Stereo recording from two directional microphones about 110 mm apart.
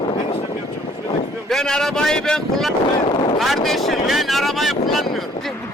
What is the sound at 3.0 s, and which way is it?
Vehicle, 50° left (ahead or behind).